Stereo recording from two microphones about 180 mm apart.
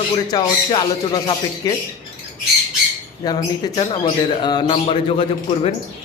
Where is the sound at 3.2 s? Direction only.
25° left (ahead or behind).